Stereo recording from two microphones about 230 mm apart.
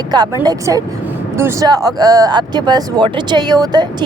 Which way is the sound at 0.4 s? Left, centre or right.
Centre.